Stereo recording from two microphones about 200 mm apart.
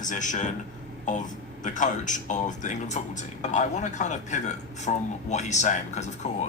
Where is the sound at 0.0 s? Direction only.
40° left (ahead or behind).